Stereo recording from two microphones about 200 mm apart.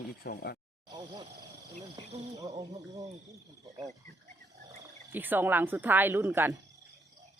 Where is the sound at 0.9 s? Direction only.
20° right (ahead or behind).